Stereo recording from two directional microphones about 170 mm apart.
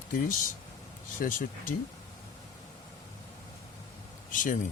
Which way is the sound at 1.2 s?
55° left (ahead or behind).